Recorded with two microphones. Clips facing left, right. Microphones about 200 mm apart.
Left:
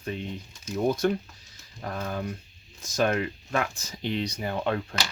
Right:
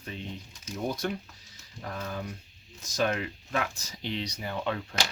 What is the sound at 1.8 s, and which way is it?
Speech, 55° left (ahead or behind).